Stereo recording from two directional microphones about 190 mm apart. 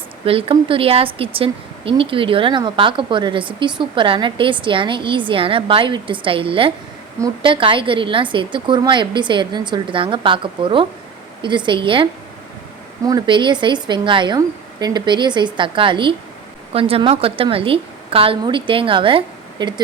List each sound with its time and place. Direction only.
0.3 s speech: 30° right (ahead or behind)
13.1 s speech: 20° right (ahead or behind)